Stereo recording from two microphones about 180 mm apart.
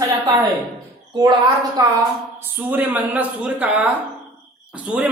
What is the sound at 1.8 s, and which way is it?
A woman's voice, 20° right (ahead or behind).